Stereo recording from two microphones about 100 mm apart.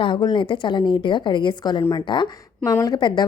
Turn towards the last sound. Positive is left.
turn(degrees=45)  # may be behind; listen again after turning